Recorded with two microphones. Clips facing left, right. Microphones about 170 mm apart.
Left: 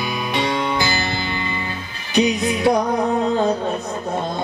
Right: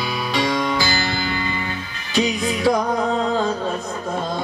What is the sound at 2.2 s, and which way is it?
Music, 20° left (ahead or behind).